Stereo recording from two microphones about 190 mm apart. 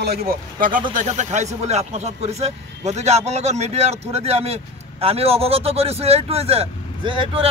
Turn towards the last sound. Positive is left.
turn(degrees=-30)  # may be behind; listen again after turning